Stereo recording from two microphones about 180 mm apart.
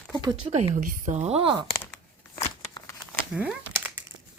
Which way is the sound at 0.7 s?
45° right (ahead or behind).